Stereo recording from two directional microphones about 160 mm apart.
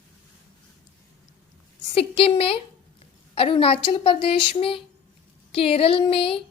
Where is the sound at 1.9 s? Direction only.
35° left (ahead or behind).